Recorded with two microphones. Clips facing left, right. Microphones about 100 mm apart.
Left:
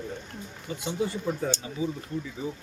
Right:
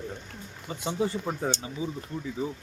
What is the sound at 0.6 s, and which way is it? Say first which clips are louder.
Speech: right 1 dB; 40° right (ahead or behind).